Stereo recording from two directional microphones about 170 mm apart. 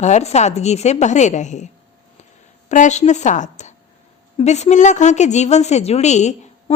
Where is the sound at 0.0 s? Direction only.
40° left (ahead or behind).